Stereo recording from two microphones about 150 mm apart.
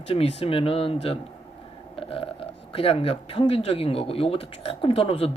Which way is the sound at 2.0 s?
40° left (ahead or behind).